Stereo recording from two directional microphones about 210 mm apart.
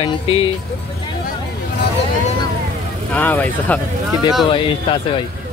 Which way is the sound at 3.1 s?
10° left (ahead or behind).